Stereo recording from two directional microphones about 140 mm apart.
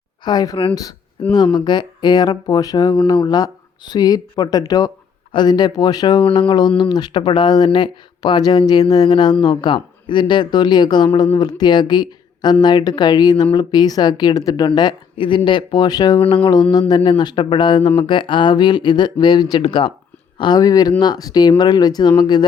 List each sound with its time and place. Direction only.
0.3 s speech: 30° left (ahead or behind)